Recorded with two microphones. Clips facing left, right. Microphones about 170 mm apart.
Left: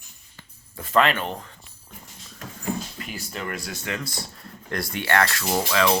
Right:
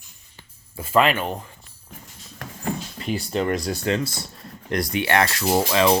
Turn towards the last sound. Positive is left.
turn(degrees=-20)  # may be behind; listen again after turning